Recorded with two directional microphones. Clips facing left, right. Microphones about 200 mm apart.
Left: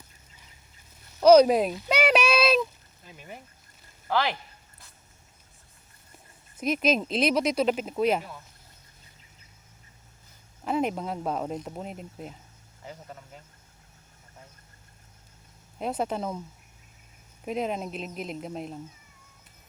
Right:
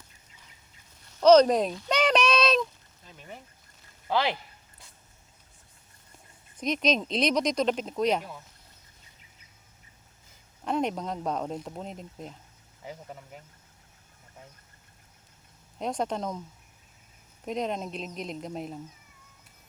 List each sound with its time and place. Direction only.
1.2 s a sound: 10° left (ahead or behind)
4.1 s speech: 20° right (ahead or behind)
6.6 s speech: 5° left (ahead or behind)
10.6 s speech: 5° left (ahead or behind)
12.8 s speech: 15° right (ahead or behind)
15.8 s speech: 5° left (ahead or behind)
17.4 s speech: 5° left (ahead or behind)